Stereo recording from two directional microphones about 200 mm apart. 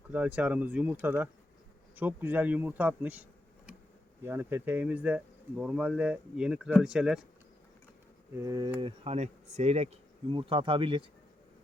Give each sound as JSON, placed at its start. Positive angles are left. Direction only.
{"t": 0.1, "sound": "speech", "side_deg": -5}
{"t": 8.4, "sound": "speech", "side_deg": -15}
{"t": 9.0, "sound": "speech", "side_deg": -35}